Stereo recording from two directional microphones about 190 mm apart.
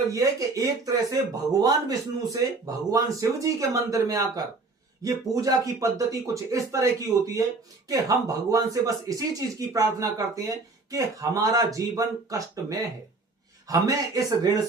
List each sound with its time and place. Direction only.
0.1 s speech: 20° right (ahead or behind)
7.9 s speech: 20° right (ahead or behind)